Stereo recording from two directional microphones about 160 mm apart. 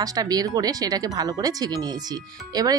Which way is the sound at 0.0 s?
25° right (ahead or behind).